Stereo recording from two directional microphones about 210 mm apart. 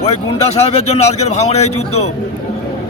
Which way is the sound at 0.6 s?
30° left (ahead or behind).